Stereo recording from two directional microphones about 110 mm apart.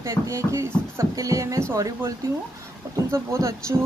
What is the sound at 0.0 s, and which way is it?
A woman's voice, 25° right (ahead or behind).